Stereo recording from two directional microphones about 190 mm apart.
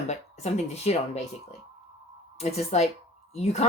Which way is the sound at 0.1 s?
35° left (ahead or behind).